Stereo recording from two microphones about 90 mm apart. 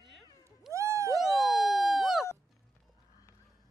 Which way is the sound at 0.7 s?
35° right (ahead or behind).